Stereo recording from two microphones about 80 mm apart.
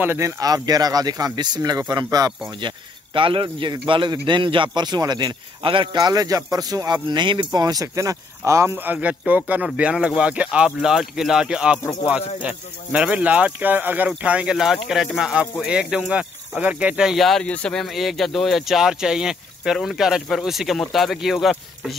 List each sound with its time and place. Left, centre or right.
0.0 s speech: right
0.4 s a man's voice: right
2.6 s speech: right
3.2 s a man's voice: right
8.7 s speech: centre
17.5 s speech: centre
17.8 s speech: centre